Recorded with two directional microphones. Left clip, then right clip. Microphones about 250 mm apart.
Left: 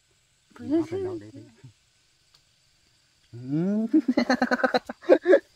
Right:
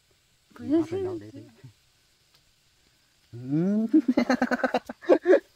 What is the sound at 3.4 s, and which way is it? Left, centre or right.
Speech, centre.